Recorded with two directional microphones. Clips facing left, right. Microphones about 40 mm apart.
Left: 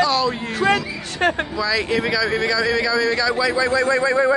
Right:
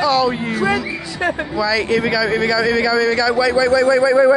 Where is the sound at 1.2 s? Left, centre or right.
Left.